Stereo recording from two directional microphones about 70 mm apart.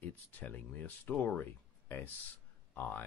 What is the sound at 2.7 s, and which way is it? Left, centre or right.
Speech, left.